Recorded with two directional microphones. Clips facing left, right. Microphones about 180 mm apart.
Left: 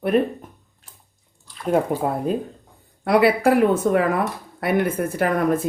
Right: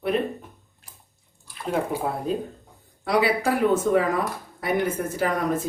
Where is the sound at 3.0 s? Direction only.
60° left (ahead or behind).